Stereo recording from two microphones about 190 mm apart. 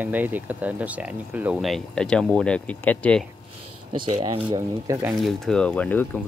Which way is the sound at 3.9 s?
25° right (ahead or behind).